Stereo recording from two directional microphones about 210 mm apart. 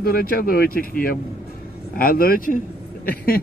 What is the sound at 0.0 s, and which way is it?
Speech, 45° left (ahead or behind).